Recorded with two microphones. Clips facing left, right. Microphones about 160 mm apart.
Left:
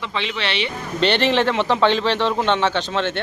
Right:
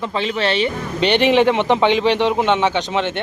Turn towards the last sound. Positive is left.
turn(degrees=-15)  # may be behind; listen again after turning